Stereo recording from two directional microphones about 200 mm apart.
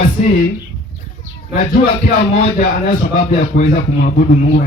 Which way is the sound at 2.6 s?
40° left (ahead or behind).